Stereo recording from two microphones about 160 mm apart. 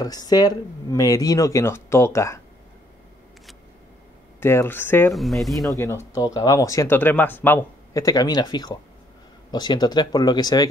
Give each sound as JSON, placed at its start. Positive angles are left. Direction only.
{"t": 0.0, "sound": "speech", "side_deg": 25}
{"t": 4.4, "sound": "speech", "side_deg": 15}
{"t": 5.1, "sound": "speech", "side_deg": 0}
{"t": 5.8, "sound": "speech", "side_deg": 15}